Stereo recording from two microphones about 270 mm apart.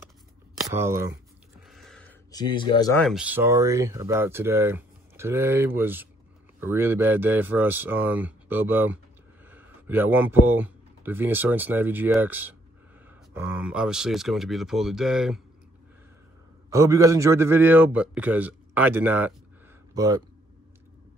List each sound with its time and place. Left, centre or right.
0.7 s speech: centre
1.7 s a sound: centre
2.5 s speech: centre
3.0 s speech: centre
16.7 s speech: centre